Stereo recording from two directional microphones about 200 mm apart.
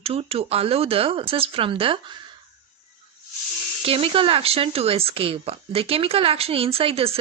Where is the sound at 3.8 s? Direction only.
30° right (ahead or behind).